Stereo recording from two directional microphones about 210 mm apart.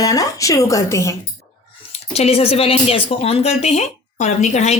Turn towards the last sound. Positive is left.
turn(degrees=35)  # may be behind; listen again after turning